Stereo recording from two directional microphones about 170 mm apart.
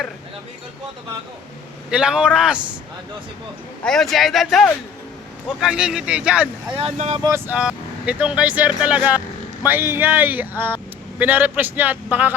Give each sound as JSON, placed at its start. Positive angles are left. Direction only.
{"t": 1.9, "sound": "speech", "side_deg": -5}
{"t": 3.8, "sound": "speech", "side_deg": 0}
{"t": 6.7, "sound": "speech", "side_deg": -40}
{"t": 7.2, "sound": "speech", "side_deg": -15}